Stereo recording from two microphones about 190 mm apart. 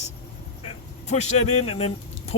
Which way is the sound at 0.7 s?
35° left (ahead or behind).